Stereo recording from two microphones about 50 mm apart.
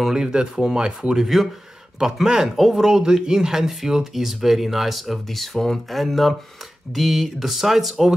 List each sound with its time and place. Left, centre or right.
0.0 s speech: centre
1.2 s speech: centre